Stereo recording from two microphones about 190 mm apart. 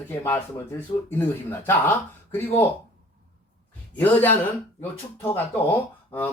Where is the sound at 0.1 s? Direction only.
15° left (ahead or behind).